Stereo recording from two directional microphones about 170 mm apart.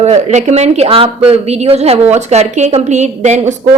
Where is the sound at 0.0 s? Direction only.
40° right (ahead or behind).